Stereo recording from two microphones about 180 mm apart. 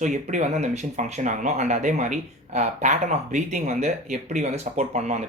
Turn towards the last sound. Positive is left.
turn(degrees=-40)  # may be behind; listen again after turning